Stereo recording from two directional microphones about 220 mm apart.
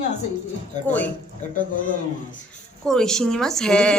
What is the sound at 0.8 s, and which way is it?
Speech, 5° left (ahead or behind).